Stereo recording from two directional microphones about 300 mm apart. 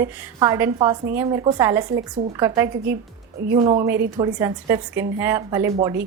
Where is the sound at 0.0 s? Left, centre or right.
Centre.